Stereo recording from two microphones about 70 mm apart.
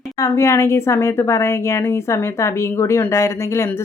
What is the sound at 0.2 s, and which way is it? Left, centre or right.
Speech, left.